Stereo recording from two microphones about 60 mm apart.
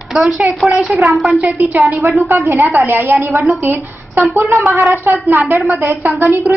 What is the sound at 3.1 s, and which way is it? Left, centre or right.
Speech, centre.